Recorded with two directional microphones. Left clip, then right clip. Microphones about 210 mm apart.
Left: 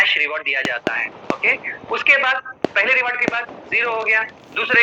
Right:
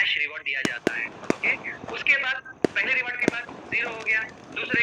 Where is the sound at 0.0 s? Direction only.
40° left (ahead or behind).